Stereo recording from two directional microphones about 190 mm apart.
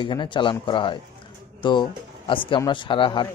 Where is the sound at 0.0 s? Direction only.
25° left (ahead or behind).